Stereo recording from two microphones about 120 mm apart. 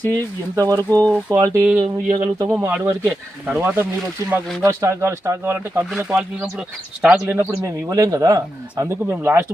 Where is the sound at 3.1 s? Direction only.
10° right (ahead or behind).